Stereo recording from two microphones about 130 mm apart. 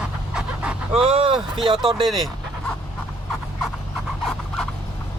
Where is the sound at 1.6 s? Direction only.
40° right (ahead or behind).